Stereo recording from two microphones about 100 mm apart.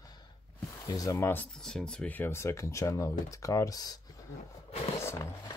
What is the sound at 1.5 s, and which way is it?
Speech, 5° left (ahead or behind).